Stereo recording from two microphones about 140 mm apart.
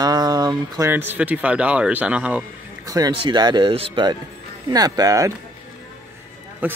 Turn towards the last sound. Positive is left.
turn(degrees=-15)  # may be behind; listen again after turning